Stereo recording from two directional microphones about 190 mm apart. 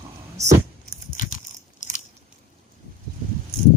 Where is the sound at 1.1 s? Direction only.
45° left (ahead or behind).